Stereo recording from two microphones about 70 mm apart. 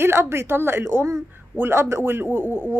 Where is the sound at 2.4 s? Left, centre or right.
Centre.